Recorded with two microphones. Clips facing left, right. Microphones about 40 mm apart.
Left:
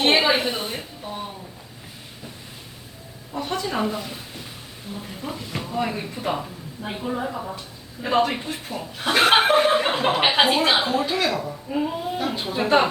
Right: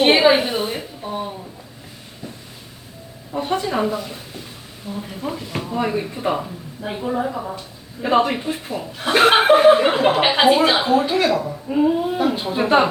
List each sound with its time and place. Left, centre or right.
0.0 s a sound: centre
3.3 s a woman's voice: right
3.7 s speech: centre
5.2 s speech: centre
11.0 s speech: centre